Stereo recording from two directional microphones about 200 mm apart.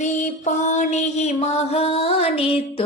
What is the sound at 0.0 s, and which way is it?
Music, 35° left (ahead or behind).